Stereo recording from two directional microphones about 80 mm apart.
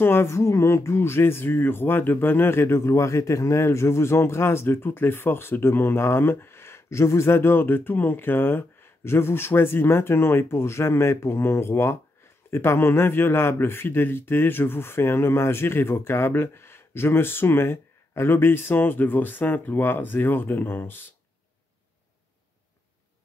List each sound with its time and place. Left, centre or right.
0.0 s a man's voice: left